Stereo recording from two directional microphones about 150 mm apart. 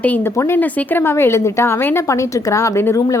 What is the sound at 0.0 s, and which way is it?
A woman's voice, 15° left (ahead or behind).